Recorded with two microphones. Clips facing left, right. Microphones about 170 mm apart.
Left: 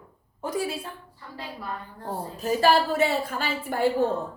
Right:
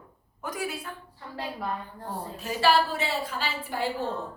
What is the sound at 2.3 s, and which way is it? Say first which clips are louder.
A woman's voice: left 3 dB; 45° left (ahead or behind).